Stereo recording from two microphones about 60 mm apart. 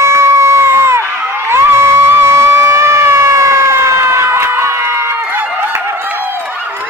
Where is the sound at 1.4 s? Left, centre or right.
Right.